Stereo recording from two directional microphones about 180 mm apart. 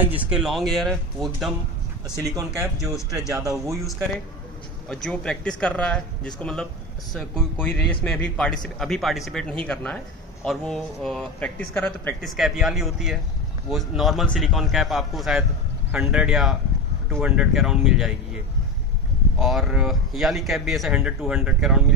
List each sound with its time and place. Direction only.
0.0 s a man's voice: 5° right (ahead or behind)
2.1 s speech: 20° right (ahead or behind)
4.8 s a man's voice: 5° left (ahead or behind)
19.3 s a man's voice: centre (ahead or behind)